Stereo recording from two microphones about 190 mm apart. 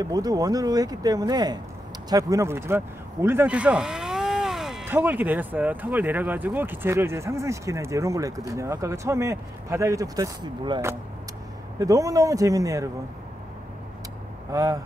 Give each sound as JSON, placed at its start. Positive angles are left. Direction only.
{"t": 0.0, "sound": "speech", "side_deg": -20}
{"t": 14.5, "sound": "speech", "side_deg": -20}